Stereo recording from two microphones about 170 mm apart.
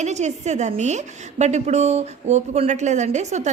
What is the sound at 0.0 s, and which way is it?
A woman's voice, 40° right (ahead or behind).